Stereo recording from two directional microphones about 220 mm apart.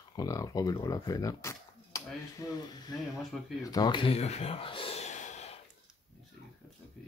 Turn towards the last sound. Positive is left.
turn(degrees=30)  # may be behind; listen again after turning